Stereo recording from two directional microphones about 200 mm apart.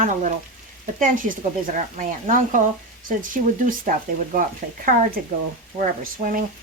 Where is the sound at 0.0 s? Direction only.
40° right (ahead or behind).